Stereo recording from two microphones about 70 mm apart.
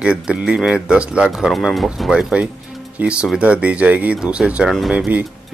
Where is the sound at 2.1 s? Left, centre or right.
Centre.